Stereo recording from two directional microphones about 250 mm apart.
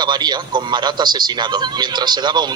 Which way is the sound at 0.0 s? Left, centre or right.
Centre.